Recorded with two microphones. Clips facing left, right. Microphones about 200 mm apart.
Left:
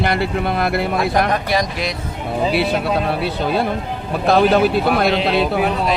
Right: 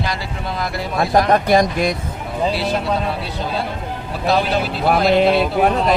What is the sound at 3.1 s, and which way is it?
Speech, 60° left (ahead or behind).